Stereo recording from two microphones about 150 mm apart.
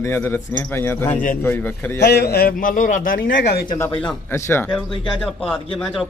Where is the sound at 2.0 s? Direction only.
90° left.